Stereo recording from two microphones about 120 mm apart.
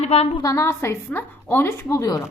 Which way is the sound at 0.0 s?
60° left (ahead or behind).